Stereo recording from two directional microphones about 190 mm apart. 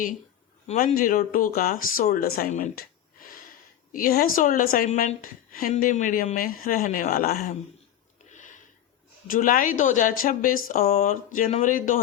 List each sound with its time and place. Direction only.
0.7 s speech: 40° left (ahead or behind)
3.9 s speech: 50° left (ahead or behind)
8.3 s a sound: 40° left (ahead or behind)
9.3 s speech: 45° left (ahead or behind)